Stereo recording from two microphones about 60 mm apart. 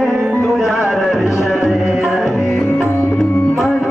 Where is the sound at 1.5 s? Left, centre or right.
Centre.